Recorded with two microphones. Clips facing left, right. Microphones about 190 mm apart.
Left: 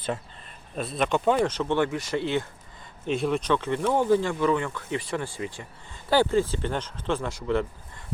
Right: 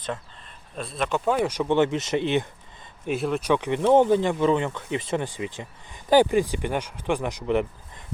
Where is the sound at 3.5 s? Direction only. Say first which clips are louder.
Right 8 dB; 15° right (ahead or behind).